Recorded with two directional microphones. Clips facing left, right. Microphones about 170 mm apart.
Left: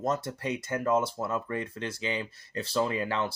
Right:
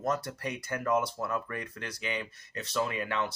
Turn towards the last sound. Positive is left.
turn(degrees=30)  # may be behind; listen again after turning